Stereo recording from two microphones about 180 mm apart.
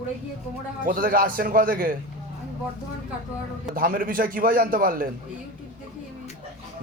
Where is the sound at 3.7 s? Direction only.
50° right (ahead or behind).